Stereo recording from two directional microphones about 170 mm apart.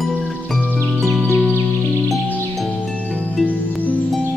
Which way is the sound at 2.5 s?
Centre (ahead or behind).